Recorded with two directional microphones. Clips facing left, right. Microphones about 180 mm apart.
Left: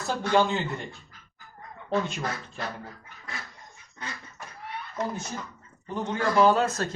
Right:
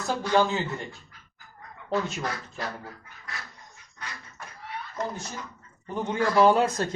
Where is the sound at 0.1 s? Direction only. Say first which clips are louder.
Even; centre (ahead or behind).